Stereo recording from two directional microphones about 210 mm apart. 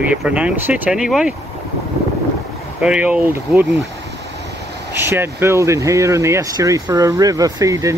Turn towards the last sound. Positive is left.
turn(degrees=-15)  # may be behind; listen again after turning